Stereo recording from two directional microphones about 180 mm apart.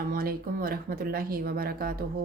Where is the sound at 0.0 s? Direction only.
55° right (ahead or behind).